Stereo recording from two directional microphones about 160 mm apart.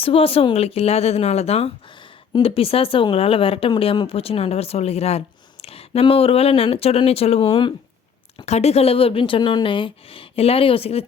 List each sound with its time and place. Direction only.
0.0 s speech: 35° left (ahead or behind)